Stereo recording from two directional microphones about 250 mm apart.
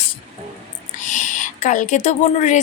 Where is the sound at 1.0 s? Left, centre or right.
Left.